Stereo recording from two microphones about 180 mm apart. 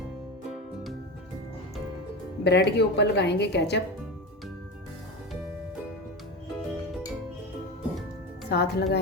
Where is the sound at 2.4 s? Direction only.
70° left (ahead or behind).